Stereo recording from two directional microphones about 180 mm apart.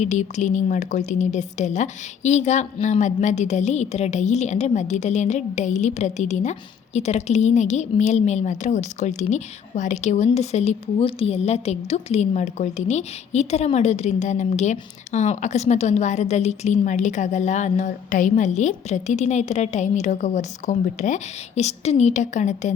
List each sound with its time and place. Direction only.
0.0 s a woman's voice: 40° left (ahead or behind)